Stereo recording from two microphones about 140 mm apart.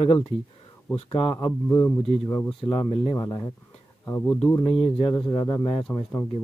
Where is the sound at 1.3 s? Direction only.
25° left (ahead or behind).